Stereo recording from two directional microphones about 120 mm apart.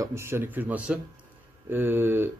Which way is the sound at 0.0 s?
20° right (ahead or behind).